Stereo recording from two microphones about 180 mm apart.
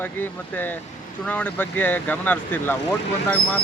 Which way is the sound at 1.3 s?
10° left (ahead or behind).